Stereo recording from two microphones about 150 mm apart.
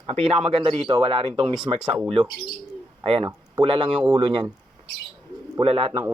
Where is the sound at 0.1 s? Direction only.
45° right (ahead or behind).